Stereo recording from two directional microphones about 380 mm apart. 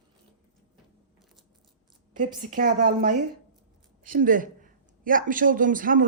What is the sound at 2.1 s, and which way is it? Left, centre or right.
Speech, centre.